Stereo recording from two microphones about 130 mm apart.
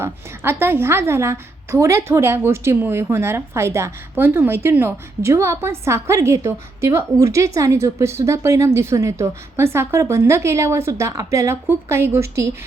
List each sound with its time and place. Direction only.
0.0 s a woman's voice: 15° right (ahead or behind)